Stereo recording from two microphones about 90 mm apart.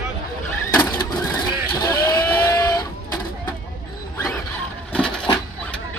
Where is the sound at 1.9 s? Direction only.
40° left (ahead or behind).